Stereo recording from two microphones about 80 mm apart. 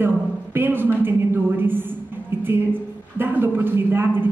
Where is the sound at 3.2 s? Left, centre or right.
Right.